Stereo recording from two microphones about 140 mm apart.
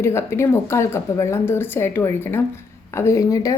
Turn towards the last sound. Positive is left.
turn(degrees=25)  # may be behind; listen again after turning